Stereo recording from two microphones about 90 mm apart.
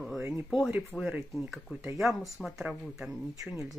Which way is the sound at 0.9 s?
10° left (ahead or behind).